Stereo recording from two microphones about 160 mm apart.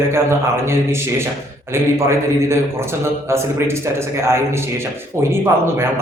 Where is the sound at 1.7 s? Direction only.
15° right (ahead or behind).